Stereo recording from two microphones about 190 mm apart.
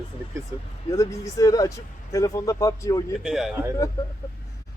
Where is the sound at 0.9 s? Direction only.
15° left (ahead or behind).